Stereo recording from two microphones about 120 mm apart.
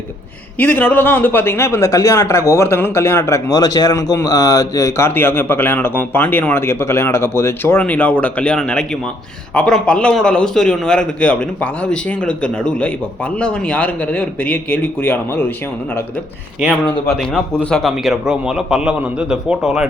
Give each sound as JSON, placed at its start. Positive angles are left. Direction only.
{"t": 0.6, "sound": "a man's voice", "side_deg": 15}
{"t": 16.8, "sound": "a man's voice", "side_deg": 5}
{"t": 17.9, "sound": "a man's voice", "side_deg": -5}